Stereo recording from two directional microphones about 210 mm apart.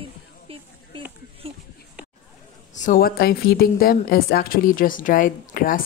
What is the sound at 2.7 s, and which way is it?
A woman's voice, 40° left (ahead or behind).